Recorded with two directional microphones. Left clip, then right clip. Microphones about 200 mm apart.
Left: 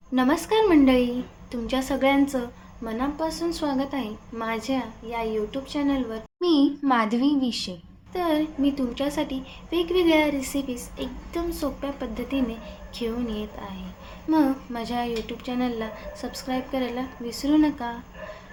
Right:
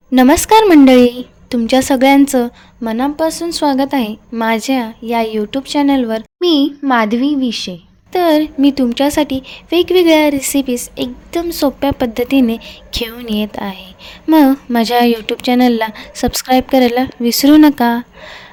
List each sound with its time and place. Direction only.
0.1 s a woman's voice: 55° right (ahead or behind)